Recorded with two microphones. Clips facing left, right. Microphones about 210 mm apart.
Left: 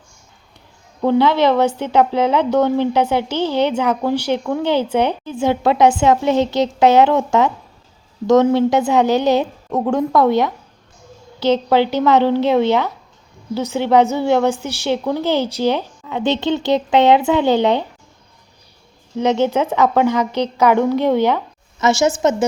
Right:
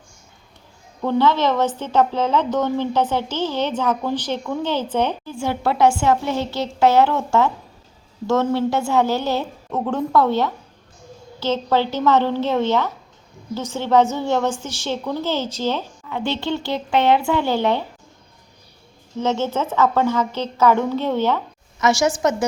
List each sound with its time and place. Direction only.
1.0 s a woman's voice: 15° left (ahead or behind)
19.2 s a woman's voice: 15° left (ahead or behind)
21.8 s a woman's voice: 25° left (ahead or behind)